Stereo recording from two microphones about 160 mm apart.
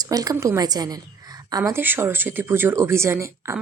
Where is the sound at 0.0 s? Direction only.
25° right (ahead or behind).